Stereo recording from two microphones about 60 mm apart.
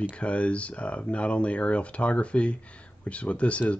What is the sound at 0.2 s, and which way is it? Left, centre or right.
Speech, centre.